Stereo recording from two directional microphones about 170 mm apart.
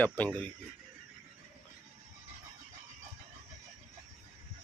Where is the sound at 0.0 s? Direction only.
10° left (ahead or behind).